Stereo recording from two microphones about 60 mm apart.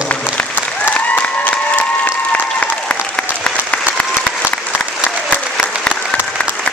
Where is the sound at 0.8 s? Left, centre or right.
Left.